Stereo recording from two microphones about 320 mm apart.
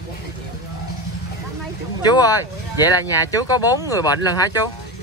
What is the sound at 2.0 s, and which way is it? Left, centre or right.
Speech, centre.